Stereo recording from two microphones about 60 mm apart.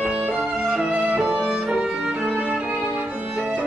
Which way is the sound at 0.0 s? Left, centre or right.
Right.